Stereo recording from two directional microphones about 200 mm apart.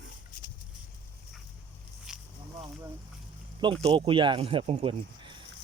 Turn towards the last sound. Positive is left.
turn(degrees=-25)  # may be behind; listen again after turning